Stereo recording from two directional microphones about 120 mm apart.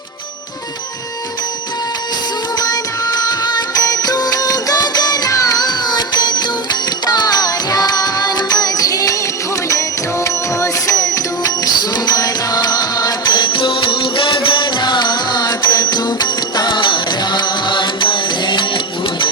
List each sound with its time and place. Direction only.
2.6 s music: 30° left (ahead or behind)
10.6 s music: 30° left (ahead or behind)